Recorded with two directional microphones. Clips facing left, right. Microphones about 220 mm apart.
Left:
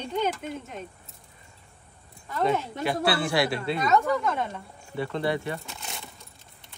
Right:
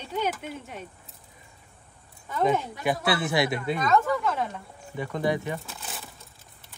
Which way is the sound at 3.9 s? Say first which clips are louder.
Left 1 dB; centre (ahead or behind).